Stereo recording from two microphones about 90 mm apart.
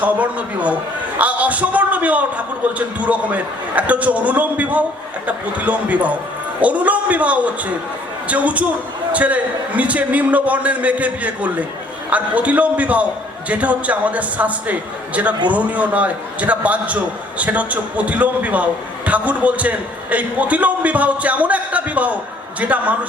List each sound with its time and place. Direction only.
0.0 s a man's voice: 15° right (ahead or behind)